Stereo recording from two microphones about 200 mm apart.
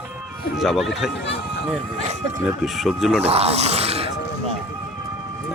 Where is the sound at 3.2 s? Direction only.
30° right (ahead or behind).